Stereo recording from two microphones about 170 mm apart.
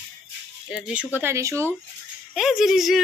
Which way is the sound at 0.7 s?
5° right (ahead or behind).